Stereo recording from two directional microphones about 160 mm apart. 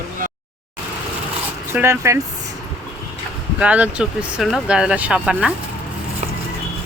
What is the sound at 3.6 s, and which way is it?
Speech, 10° right (ahead or behind).